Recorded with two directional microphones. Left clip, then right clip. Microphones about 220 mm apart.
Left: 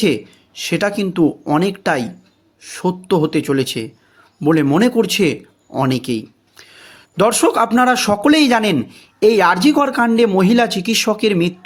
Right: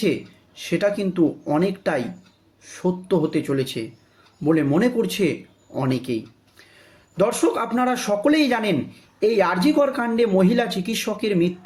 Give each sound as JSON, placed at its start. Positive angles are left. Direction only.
{"t": 0.0, "sound": "speech", "side_deg": 45}